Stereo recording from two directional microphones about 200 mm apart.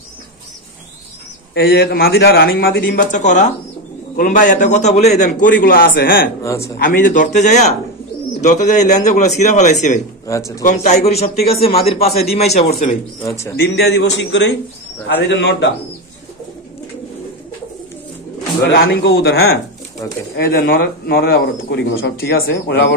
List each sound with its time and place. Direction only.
1.5 s a man's voice: 55° left (ahead or behind)
6.4 s a man's voice: 15° left (ahead or behind)
6.8 s a man's voice: 45° left (ahead or behind)
10.2 s a man's voice: 15° left (ahead or behind)
10.6 s a man's voice: 35° left (ahead or behind)
13.2 s a man's voice: 15° left (ahead or behind)
13.6 s a man's voice: 55° left (ahead or behind)
18.6 s a man's voice: 55° left (ahead or behind)